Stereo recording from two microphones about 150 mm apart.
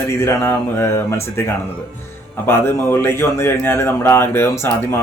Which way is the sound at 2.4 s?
15° left (ahead or behind).